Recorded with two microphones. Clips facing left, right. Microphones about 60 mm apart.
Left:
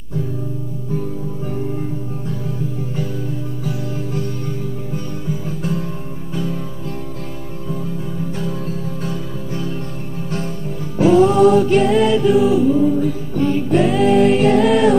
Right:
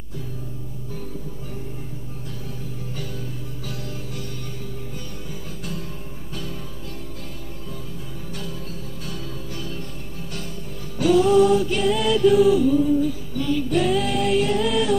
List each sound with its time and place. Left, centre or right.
5.6 s music: left
9.0 s music: left
11.0 s music: left
11.8 s music: left
13.0 s music: left
14.5 s music: left